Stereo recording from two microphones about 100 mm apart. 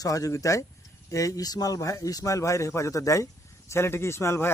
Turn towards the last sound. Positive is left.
turn(degrees=25)  # may be behind; listen again after turning